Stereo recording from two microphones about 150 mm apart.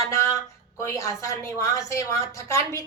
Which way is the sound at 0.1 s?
20° left (ahead or behind).